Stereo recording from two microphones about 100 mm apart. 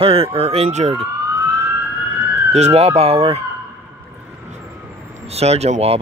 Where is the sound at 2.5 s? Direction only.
90° right.